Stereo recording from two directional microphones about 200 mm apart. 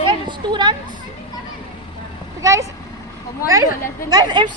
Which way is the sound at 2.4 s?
15° right (ahead or behind).